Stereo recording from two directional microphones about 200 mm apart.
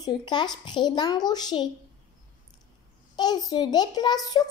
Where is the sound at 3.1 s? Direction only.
20° left (ahead or behind).